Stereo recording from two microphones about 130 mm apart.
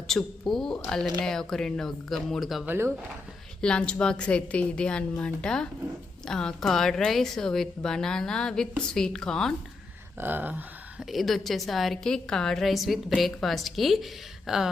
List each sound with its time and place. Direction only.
0.1 s a woman's voice: 5° left (ahead or behind)
2.6 s speech: 20° right (ahead or behind)
3.6 s a woman's voice: 5° left (ahead or behind)
10.2 s a sound: 15° right (ahead or behind)
11.0 s a woman's voice: centre (ahead or behind)